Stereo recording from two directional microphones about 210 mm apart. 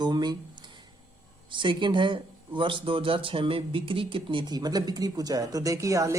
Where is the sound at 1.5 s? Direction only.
20° right (ahead or behind).